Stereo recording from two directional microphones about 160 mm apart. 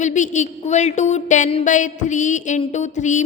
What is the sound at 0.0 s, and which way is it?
A woman's voice, 50° left (ahead or behind).